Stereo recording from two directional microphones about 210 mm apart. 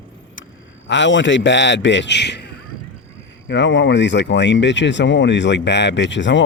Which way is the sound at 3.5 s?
60° left (ahead or behind).